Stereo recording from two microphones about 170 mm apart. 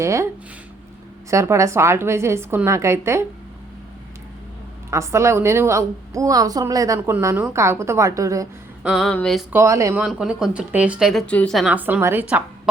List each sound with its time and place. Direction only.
0.0 s a sound: 15° right (ahead or behind)
1.3 s a woman's voice: 15° right (ahead or behind)
4.9 s a woman's voice: 15° right (ahead or behind)
8.8 s speech: centre (ahead or behind)
9.5 s a woman's voice: 15° right (ahead or behind)
10.0 s speech: 5° right (ahead or behind)